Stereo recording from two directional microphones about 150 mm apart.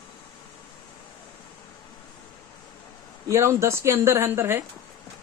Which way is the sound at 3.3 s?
20° right (ahead or behind).